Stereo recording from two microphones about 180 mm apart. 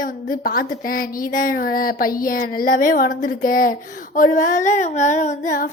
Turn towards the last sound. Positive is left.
turn(degrees=45)  # may be behind; listen again after turning